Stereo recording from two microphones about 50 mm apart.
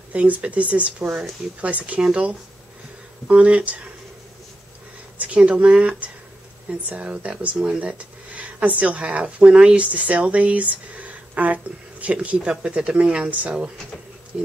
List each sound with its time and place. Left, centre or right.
0.1 s a woman's voice: right
3.3 s a woman's voice: right
5.1 s a woman's voice: right
7.5 s a woman's voice: centre